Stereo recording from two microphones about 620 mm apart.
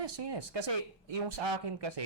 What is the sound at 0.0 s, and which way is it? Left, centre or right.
Speech, right.